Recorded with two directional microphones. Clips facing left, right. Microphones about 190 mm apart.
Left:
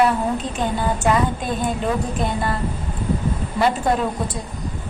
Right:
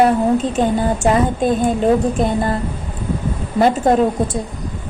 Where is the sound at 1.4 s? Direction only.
45° right (ahead or behind).